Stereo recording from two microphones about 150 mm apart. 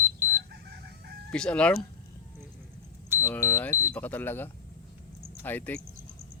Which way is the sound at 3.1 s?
15° left (ahead or behind).